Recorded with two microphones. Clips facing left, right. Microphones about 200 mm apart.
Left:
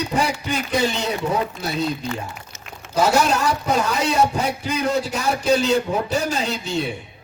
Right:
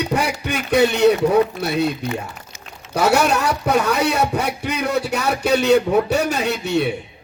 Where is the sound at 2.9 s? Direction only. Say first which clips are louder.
Right 1 dB; 65° right (ahead or behind).